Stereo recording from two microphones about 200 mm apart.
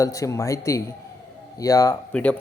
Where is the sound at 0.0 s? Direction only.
15° left (ahead or behind).